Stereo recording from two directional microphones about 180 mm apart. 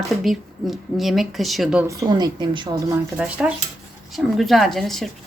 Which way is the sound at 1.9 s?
20° right (ahead or behind).